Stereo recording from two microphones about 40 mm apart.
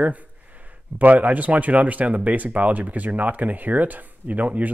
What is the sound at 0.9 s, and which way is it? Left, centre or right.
Speech, right.